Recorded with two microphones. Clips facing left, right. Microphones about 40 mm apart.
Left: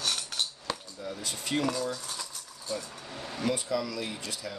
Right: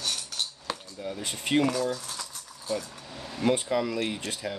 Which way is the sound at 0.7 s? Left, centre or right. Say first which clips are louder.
Right 1 dB; centre.